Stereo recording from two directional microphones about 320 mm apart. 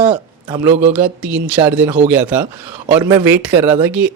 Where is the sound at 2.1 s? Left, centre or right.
Centre.